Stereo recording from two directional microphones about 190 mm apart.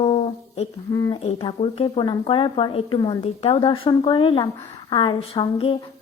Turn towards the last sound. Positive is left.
turn(degrees=25)  # may be behind; listen again after turning